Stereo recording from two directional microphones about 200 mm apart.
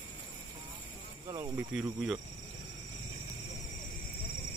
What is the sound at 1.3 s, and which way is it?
Speech, 15° right (ahead or behind).